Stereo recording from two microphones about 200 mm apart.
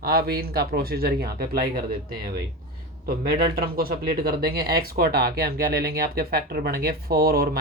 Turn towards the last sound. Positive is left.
turn(degrees=-50)  # may be behind; listen again after turning